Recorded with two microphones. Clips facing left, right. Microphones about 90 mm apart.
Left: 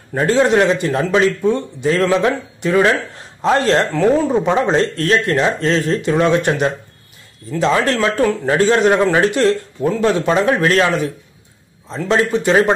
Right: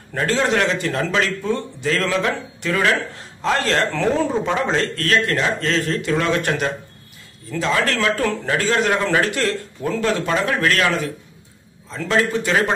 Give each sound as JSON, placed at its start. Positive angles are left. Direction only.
{"t": 0.1, "sound": "a man's voice", "side_deg": 20}